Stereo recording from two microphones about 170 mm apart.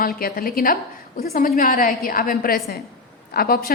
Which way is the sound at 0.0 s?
60° left (ahead or behind).